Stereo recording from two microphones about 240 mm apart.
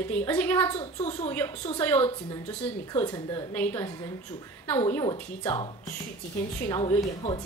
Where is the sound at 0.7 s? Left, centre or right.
Left.